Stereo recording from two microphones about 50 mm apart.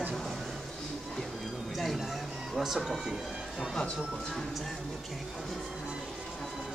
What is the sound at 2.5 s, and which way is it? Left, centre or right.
Speech, centre.